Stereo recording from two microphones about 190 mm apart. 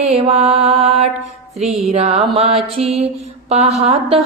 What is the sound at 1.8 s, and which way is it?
Music, 35° right (ahead or behind).